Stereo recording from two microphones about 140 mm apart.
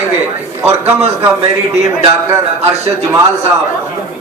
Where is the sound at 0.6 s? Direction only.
15° right (ahead or behind).